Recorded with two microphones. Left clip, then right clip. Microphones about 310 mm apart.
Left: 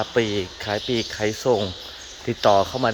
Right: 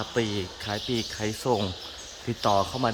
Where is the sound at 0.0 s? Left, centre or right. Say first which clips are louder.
Left 6 dB; centre.